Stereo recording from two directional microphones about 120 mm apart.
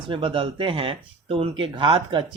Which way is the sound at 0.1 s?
45° right (ahead or behind).